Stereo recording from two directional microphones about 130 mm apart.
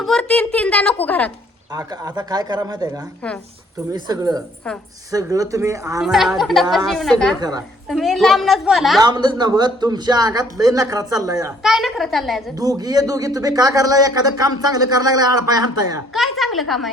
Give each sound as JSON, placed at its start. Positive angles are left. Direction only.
{"t": 0.0, "sound": "a woman's voice", "side_deg": 5}
{"t": 1.7, "sound": "a man's voice", "side_deg": -30}
{"t": 6.0, "sound": "speech", "side_deg": 0}
{"t": 7.3, "sound": "speech", "side_deg": -30}
{"t": 7.9, "sound": "speech", "side_deg": 0}
{"t": 9.0, "sound": "speech", "side_deg": -35}
{"t": 11.6, "sound": "speech", "side_deg": 0}
{"t": 12.5, "sound": "a man's voice", "side_deg": -30}
{"t": 16.1, "sound": "speech", "side_deg": 0}